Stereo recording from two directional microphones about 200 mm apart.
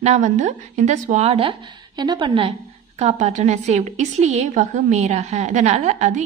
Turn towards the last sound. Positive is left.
turn(degrees=-35)  # may be behind; listen again after turning